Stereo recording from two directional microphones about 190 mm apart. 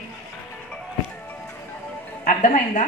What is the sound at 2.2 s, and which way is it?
Speech, 40° left (ahead or behind).